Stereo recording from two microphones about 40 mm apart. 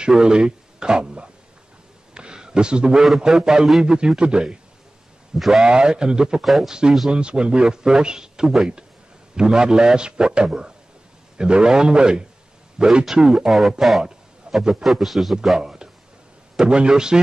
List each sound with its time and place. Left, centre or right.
0.0 s speech: right
2.1 s a sound: right
3.3 s a man's voice: centre
5.6 s a man's voice: right
6.4 s speech: centre
6.7 s a man's voice: centre
13.7 s speech: centre
14.5 s a sound: right
14.8 s speech: centre
15.6 s a sound: centre
16.5 s a man's voice: right